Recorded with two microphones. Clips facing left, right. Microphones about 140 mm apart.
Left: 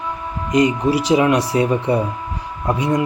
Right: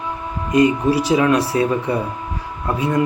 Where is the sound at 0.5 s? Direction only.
20° left (ahead or behind).